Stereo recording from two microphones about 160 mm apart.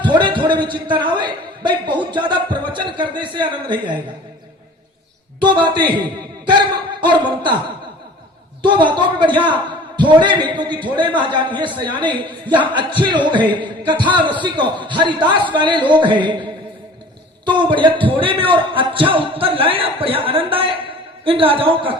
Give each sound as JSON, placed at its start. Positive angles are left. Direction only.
{"t": 0.0, "sound": "a sound", "side_deg": -30}
{"t": 0.6, "sound": "a man's voice", "side_deg": -30}
{"t": 5.4, "sound": "a man's voice", "side_deg": -30}
{"t": 8.6, "sound": "a man's voice", "side_deg": -30}